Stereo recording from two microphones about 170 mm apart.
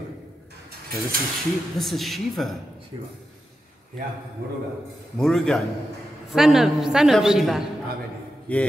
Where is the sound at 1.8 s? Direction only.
Centre (ahead or behind).